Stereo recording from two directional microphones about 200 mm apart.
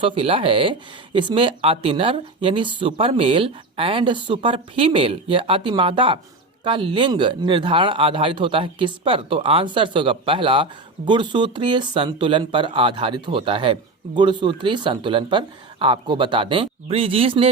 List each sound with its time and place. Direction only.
0.0 s speech: 25° right (ahead or behind)